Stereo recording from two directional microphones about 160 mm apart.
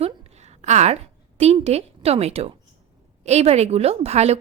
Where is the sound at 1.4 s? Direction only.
40° right (ahead or behind).